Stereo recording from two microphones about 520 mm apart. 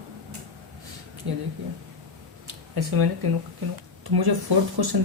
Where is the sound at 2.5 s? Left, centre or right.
Right.